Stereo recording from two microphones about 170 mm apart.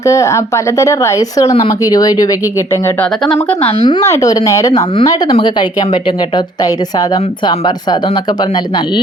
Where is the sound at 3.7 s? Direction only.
30° left (ahead or behind).